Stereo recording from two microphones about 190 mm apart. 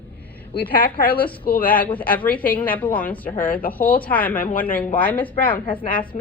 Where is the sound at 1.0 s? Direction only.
50° left (ahead or behind).